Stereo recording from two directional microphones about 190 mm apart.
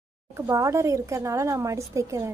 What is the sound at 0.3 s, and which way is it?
Speech, 15° right (ahead or behind).